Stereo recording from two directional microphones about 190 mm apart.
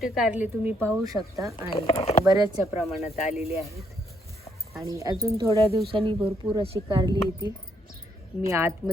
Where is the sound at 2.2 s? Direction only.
20° right (ahead or behind).